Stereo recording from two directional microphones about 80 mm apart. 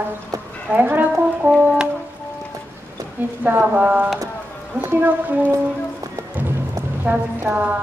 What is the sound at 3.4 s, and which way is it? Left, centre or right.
A woman's voice, right.